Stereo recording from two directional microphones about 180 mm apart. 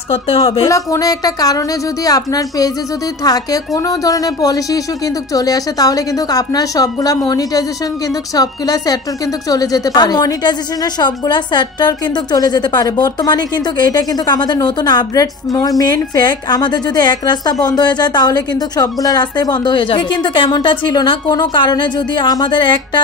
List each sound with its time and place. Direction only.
0.1 s a woman's voice: 30° left (ahead or behind)
0.7 s a woman's voice: 20° left (ahead or behind)